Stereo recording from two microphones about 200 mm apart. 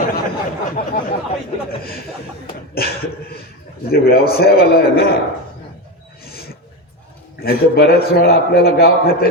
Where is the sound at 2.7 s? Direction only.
50° left (ahead or behind).